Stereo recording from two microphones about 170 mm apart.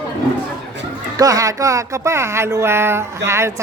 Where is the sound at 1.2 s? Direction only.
20° right (ahead or behind).